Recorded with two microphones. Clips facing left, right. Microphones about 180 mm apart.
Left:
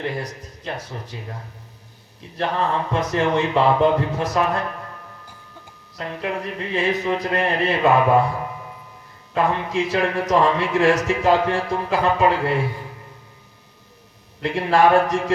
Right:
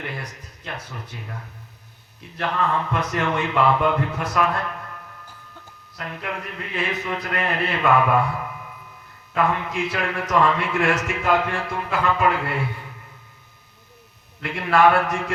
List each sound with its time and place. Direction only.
0.0 s speech: 30° left (ahead or behind)
2.4 s a sound: 30° left (ahead or behind)
6.0 s speech: 30° left (ahead or behind)
9.3 s speech: 30° left (ahead or behind)
14.4 s speech: 30° left (ahead or behind)